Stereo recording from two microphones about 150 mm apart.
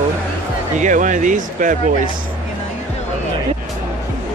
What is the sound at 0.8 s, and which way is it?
Speech, 55° right (ahead or behind).